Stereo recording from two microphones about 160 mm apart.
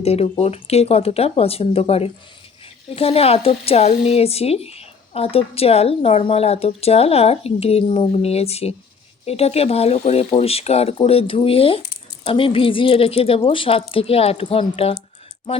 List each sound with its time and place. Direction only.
0.0 s speech: 40° left (ahead or behind)